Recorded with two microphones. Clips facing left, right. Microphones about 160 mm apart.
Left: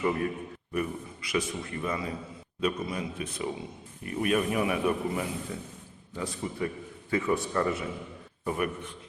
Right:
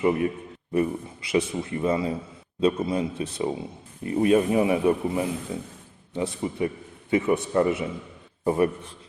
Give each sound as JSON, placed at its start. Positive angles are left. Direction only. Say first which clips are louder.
{"t": 0.0, "sound": "speech", "louder": "right 5 dB", "side_deg": -20}